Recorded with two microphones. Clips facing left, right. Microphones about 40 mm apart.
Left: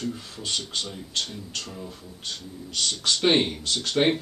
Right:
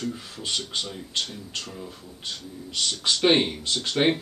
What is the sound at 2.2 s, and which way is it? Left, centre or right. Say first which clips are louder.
Speech: right 1 dB; centre.